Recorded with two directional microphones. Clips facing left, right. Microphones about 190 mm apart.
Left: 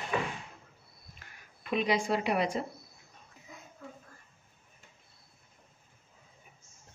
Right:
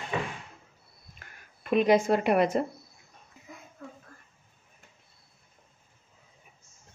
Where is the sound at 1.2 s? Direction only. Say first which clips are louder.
Right 4 dB; 50° right (ahead or behind).